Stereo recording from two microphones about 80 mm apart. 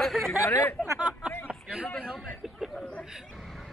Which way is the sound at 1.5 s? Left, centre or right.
Centre.